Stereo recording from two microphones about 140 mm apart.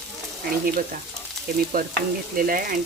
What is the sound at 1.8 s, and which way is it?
Speech, 90° right.